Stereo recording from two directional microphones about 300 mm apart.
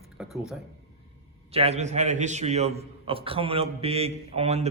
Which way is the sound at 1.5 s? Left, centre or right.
Centre.